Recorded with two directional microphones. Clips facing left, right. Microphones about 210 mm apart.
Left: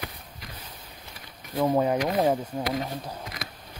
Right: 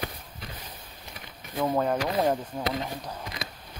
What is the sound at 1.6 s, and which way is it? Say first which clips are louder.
Speech: left 3 dB; 15° left (ahead or behind).